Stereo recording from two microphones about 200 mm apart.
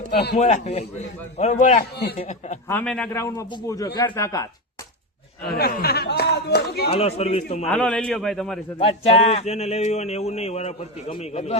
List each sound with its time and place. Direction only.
0.3 s speech: 35° left (ahead or behind)
2.6 s a man's voice: 5° left (ahead or behind)
5.5 s speech: 50° left (ahead or behind)
6.9 s speech: 30° left (ahead or behind)
7.7 s a man's voice: 5° left (ahead or behind)
8.8 s speech: 30° left (ahead or behind)